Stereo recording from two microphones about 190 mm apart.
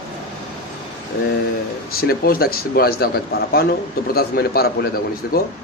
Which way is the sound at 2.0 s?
50° left (ahead or behind).